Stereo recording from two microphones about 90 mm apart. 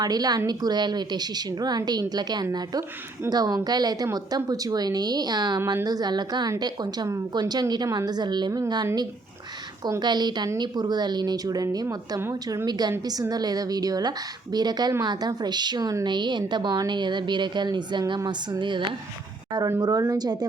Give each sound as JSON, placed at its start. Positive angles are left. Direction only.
{"t": 0.0, "sound": "a woman's voice", "side_deg": -45}
{"t": 10.0, "sound": "a woman's voice", "side_deg": -55}
{"t": 16.0, "sound": "speech", "side_deg": -60}
{"t": 19.8, "sound": "a woman's voice", "side_deg": -45}